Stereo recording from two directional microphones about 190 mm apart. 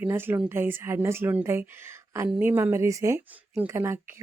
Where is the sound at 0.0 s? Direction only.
10° right (ahead or behind).